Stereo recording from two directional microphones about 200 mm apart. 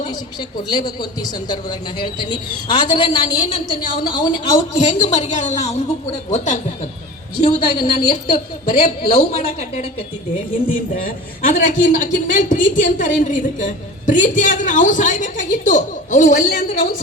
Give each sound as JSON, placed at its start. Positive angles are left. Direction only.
{"t": 0.7, "sound": "a woman's voice", "side_deg": 20}
{"t": 4.8, "sound": "a man's voice", "side_deg": 35}
{"t": 7.4, "sound": "a woman's voice", "side_deg": 25}
{"t": 10.9, "sound": "a man's voice", "side_deg": 40}